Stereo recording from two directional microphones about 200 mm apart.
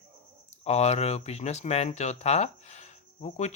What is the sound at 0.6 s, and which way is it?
Speech, 35° left (ahead or behind).